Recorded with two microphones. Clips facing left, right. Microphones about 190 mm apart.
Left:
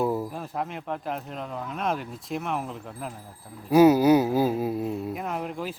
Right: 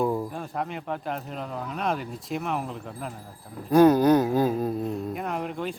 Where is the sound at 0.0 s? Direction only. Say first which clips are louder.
Even; 5° left (ahead or behind).